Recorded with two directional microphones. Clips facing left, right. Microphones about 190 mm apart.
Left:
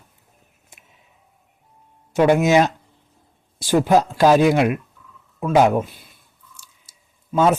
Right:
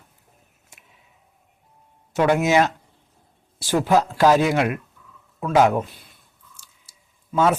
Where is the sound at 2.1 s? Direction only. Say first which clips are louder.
Left 3 dB; 20° left (ahead or behind).